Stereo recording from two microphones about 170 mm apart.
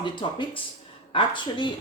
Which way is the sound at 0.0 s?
30° left (ahead or behind).